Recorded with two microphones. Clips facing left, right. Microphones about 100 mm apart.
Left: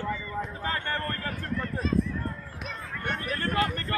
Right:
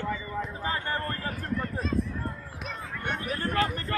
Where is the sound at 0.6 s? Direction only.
25° right (ahead or behind).